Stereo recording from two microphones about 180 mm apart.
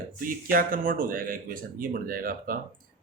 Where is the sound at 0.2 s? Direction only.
50° right (ahead or behind).